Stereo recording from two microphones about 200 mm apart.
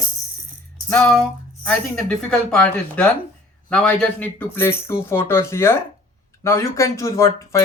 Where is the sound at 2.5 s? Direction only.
5° left (ahead or behind).